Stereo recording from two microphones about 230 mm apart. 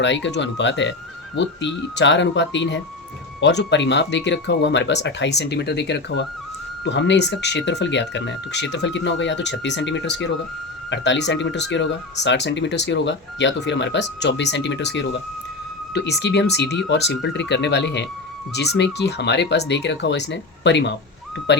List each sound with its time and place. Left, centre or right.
0.0 s speech: left
16.2 s speech: left